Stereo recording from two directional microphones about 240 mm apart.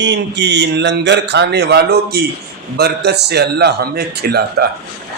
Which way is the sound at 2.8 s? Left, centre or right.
Right.